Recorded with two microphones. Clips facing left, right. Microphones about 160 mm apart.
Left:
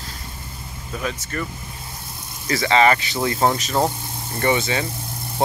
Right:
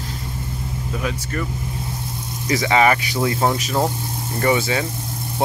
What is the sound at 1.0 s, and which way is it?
Speech, 5° right (ahead or behind).